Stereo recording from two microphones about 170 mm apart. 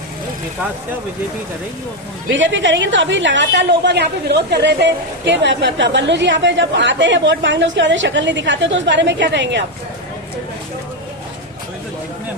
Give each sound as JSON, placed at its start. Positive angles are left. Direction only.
{"t": 2.4, "sound": "a woman's voice", "side_deg": -90}